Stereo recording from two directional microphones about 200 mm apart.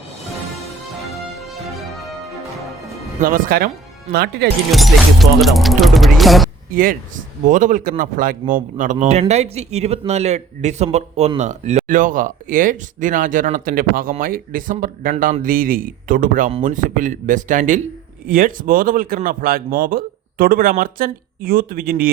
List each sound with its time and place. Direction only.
3.2 s speech: 45° right (ahead or behind)
4.7 s speech: centre (ahead or behind)
6.7 s a man's voice: 40° right (ahead or behind)